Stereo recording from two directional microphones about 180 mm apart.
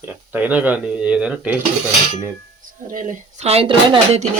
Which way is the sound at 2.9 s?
45° right (ahead or behind).